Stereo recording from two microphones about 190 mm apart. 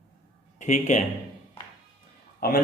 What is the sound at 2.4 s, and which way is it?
Speech, 50° left (ahead or behind).